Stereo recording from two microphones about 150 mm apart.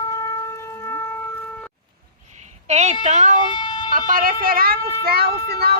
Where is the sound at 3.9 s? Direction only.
70° right (ahead or behind); by 5.3 s 90° right.